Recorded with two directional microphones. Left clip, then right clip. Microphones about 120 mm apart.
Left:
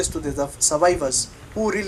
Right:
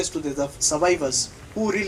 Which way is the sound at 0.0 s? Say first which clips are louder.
Left 1 dB; 40° left (ahead or behind).